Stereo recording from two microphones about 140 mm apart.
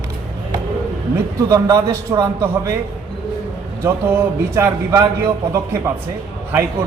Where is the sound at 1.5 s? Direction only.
25° right (ahead or behind).